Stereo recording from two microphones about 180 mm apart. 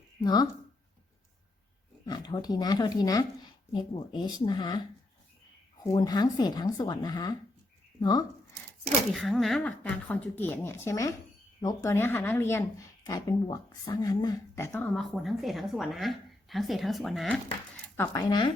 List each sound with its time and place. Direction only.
0.2 s speech: 20° left (ahead or behind)
2.0 s speech: 20° left (ahead or behind)
9.1 s a woman's voice: centre (ahead or behind)
17.9 s speech: 15° left (ahead or behind)